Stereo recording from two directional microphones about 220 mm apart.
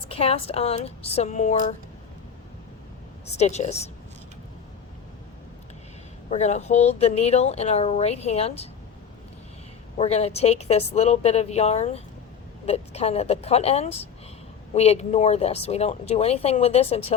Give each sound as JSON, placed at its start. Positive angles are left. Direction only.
{"t": 0.1, "sound": "speech", "side_deg": 25}
{"t": 3.3, "sound": "speech", "side_deg": 30}
{"t": 6.3, "sound": "speech", "side_deg": 30}
{"t": 10.0, "sound": "speech", "side_deg": 30}